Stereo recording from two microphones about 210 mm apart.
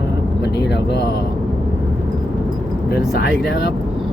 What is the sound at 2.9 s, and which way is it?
Speech, 50° left (ahead or behind).